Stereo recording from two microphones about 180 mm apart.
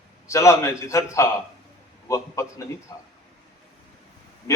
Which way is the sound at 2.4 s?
15° left (ahead or behind).